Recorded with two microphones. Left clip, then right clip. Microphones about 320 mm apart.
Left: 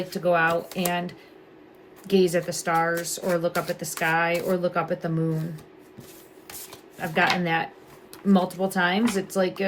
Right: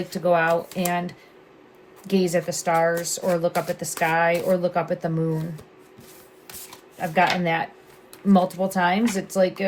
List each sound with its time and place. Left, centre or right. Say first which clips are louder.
0.1 s a woman's voice: right 2 dB; centre
2.0 s a woman's voice: left 1 dB; centre
7.0 s a woman's voice: right 2 dB; centre